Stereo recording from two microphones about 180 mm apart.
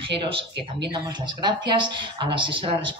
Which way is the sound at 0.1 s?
30° right (ahead or behind).